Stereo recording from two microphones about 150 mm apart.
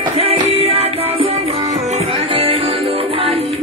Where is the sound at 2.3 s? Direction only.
35° right (ahead or behind).